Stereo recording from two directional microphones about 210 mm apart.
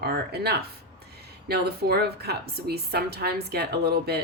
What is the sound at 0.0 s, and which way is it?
A woman's voice, 50° right (ahead or behind).